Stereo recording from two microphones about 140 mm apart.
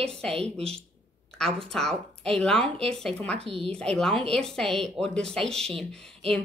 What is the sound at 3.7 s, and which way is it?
A woman's voice, 5° left (ahead or behind).